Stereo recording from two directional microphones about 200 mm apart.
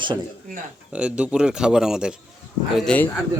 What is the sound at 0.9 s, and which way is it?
Speech, 5° right (ahead or behind).